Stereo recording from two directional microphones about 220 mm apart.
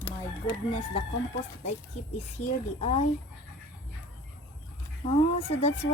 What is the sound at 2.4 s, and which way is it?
Speech, 30° left (ahead or behind).